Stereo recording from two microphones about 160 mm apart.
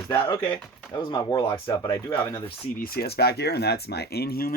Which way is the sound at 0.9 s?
25° left (ahead or behind).